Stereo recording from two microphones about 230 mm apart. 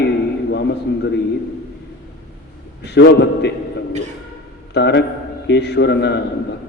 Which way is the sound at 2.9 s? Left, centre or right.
Left.